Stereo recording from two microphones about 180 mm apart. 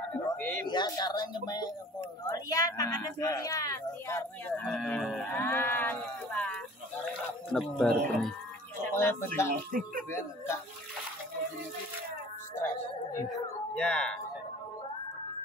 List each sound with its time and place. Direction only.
0.1 s a sound: 10° left (ahead or behind)
0.7 s speech: 20° left (ahead or behind); by 8.3 s centre (ahead or behind)
8.9 s speech: 15° left (ahead or behind)
9.7 s speech: 50° right (ahead or behind)
12.5 s music: 20° left (ahead or behind)
13.3 s a sound: 5° left (ahead or behind)